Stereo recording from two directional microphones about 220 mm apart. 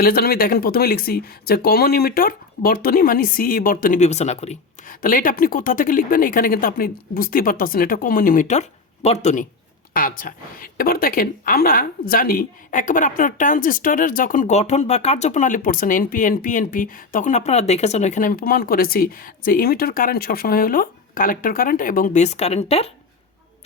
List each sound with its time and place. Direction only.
0.0 s a woman's voice: 45° left (ahead or behind); by 22.9 s 30° left (ahead or behind)